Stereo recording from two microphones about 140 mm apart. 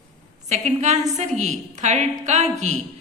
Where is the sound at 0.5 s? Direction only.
55° right (ahead or behind).